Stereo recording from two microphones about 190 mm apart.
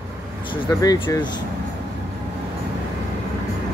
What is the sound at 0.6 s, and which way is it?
Speech, 20° left (ahead or behind).